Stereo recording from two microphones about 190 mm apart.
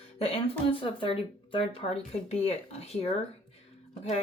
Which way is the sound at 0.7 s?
25° left (ahead or behind).